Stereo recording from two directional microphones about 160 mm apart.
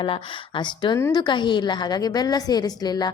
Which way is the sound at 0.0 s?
30° left (ahead or behind).